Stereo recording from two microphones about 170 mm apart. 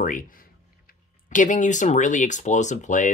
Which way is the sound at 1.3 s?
45° left (ahead or behind).